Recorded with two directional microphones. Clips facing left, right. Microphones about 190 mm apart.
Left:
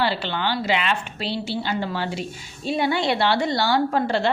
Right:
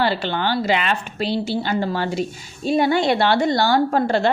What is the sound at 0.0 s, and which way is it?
A woman's voice, 45° right (ahead or behind).